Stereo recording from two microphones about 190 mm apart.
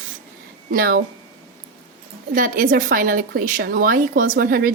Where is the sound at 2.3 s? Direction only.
45° right (ahead or behind).